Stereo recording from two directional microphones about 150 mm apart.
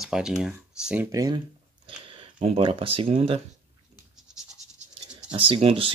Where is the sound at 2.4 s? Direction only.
40° right (ahead or behind).